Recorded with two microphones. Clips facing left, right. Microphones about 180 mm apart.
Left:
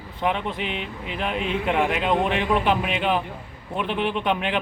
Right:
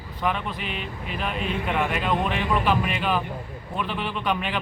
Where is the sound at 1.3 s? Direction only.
80° left.